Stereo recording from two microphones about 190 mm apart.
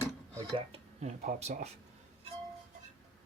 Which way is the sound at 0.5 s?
35° right (ahead or behind).